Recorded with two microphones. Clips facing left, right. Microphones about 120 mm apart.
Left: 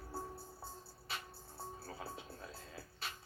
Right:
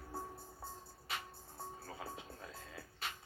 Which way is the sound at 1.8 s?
35° left (ahead or behind).